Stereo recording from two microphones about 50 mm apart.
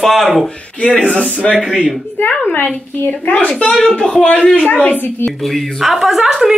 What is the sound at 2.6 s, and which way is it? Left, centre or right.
A child's voice, left.